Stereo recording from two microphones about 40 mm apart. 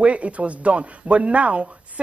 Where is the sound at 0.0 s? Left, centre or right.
Right.